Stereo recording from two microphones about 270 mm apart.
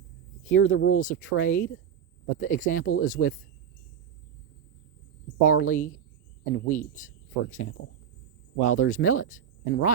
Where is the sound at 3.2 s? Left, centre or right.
Left.